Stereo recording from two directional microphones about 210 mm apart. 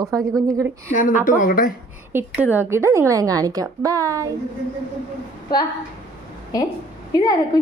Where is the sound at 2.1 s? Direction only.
10° right (ahead or behind).